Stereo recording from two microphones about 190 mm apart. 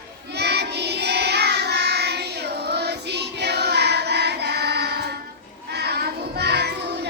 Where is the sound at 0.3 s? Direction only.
60° right (ahead or behind).